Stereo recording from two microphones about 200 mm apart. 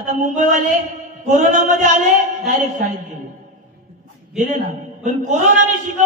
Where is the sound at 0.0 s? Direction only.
40° right (ahead or behind).